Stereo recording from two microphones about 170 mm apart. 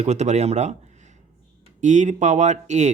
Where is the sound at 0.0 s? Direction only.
40° right (ahead or behind).